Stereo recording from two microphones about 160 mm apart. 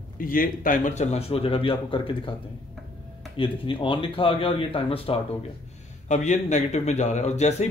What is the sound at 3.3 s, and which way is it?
A man's voice, 30° left (ahead or behind).